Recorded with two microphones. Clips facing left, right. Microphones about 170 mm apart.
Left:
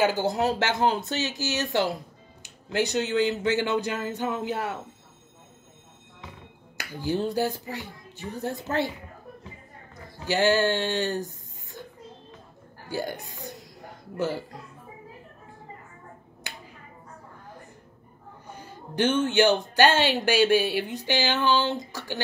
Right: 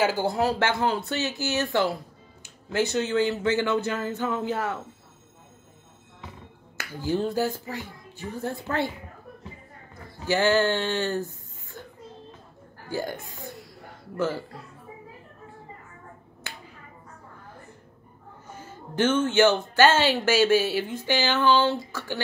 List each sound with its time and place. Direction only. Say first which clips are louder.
0.1 s speech: even; 20° left (ahead or behind)
6.8 s speech: right 1 dB; 20° left (ahead or behind)
10.3 s speech: even; 15° left (ahead or behind)
12.9 s speech: even; 15° left (ahead or behind)
18.6 s speech: right 1 dB; 15° left (ahead or behind)